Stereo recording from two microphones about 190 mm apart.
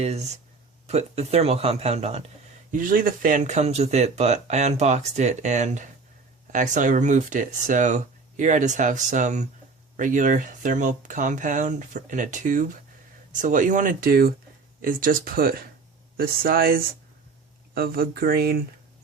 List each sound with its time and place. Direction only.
0.0 s speech: 35° right (ahead or behind)
2.7 s speech: 45° right (ahead or behind)